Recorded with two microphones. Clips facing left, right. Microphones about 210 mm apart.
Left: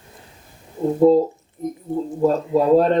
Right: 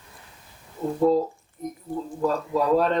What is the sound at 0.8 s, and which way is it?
Speech, 25° left (ahead or behind).